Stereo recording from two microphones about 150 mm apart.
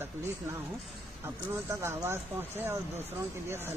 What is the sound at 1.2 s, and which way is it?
Speech, 15° right (ahead or behind).